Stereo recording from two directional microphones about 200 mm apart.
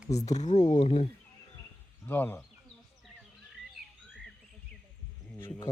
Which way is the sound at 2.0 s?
10° left (ahead or behind).